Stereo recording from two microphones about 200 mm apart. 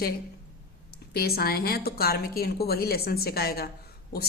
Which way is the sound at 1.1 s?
50° left (ahead or behind).